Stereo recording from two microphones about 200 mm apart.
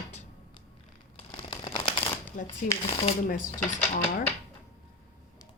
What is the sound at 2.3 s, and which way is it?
Speech, 40° left (ahead or behind).